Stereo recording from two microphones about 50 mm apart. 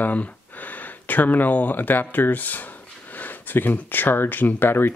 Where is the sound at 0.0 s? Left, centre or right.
Left.